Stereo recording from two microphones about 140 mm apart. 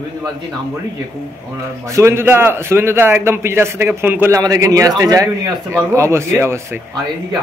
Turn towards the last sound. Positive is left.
turn(degrees=-15)  # may be behind; listen again after turning